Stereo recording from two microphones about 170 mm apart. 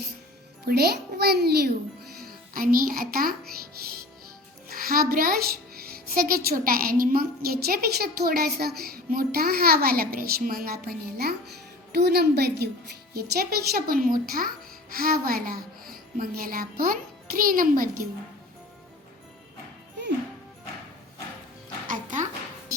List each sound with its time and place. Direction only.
0.7 s a child's voice: 65° right (ahead or behind)
2.2 s a woman's voice: 55° right (ahead or behind)
4.7 s a child's voice: 60° right (ahead or behind)
21.8 s music: 50° right (ahead or behind)